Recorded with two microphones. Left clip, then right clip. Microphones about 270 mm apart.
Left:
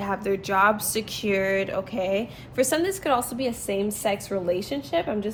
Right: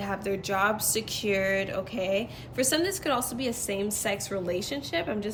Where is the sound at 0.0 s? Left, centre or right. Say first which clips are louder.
Left 4 dB; left.